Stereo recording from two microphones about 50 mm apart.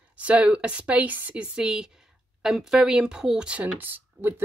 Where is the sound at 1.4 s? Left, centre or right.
Centre.